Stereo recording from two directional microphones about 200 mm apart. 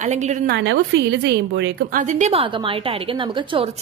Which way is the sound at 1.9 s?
35° right (ahead or behind).